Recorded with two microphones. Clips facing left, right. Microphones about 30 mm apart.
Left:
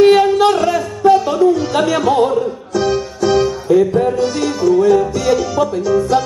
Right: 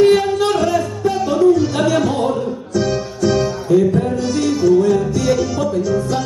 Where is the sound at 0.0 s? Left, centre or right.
Left.